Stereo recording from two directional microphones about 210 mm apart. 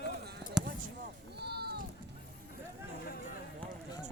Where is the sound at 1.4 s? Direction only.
50° right (ahead or behind).